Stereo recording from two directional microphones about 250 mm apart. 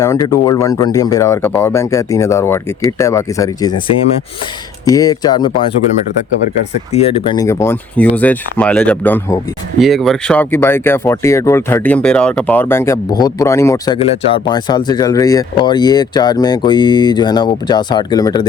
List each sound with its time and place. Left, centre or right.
0.0 s speech: centre
4.9 s speech: centre
6.9 s speech: left
7.3 s speech: centre